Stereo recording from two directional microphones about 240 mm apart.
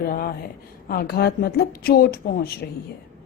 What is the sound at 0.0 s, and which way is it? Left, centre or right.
A woman's voice, left.